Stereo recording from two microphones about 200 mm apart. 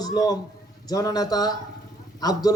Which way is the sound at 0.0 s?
20° left (ahead or behind).